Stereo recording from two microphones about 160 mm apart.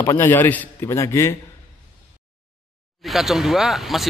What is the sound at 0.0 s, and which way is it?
A man's voice, 15° left (ahead or behind).